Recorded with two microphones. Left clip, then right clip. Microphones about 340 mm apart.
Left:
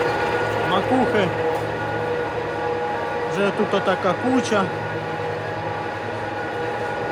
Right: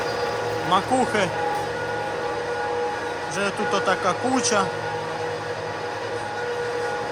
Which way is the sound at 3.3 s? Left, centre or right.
Centre.